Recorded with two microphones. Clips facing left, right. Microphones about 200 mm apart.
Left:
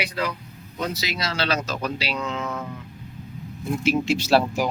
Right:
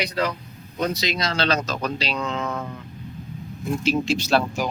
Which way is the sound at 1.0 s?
5° left (ahead or behind).